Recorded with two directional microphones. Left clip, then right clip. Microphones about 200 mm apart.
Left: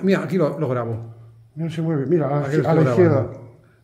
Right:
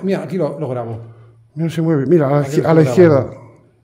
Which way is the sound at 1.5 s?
55° right (ahead or behind).